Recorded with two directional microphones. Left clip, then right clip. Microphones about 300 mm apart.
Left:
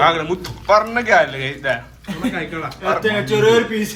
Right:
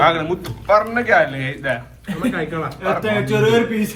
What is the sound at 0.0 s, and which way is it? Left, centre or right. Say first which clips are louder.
Speech: even; centre.